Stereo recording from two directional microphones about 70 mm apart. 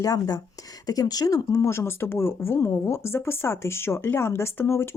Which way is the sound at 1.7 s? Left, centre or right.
Left.